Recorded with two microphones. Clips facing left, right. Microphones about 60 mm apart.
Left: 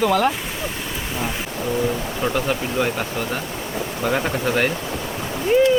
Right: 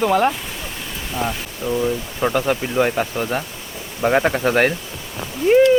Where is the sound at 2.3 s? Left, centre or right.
Right.